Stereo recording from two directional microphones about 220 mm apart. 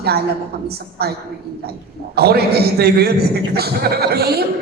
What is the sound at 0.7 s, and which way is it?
Speech, 45° right (ahead or behind).